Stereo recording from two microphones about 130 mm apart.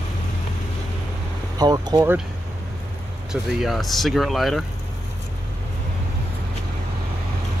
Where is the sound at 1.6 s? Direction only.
30° right (ahead or behind).